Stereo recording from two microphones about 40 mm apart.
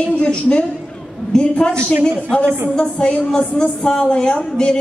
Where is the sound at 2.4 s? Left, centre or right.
Right.